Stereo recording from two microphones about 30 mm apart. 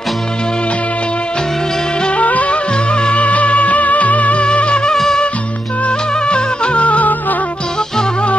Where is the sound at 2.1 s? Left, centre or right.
Left.